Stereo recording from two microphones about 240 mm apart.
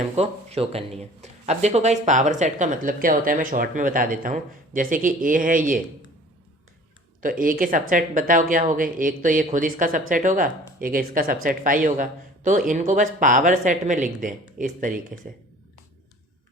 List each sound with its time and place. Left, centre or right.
0.0 s speech: right
7.2 s speech: right